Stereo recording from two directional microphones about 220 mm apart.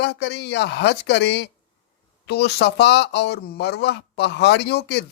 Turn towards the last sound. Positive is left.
turn(degrees=50)  # may be behind; listen again after turning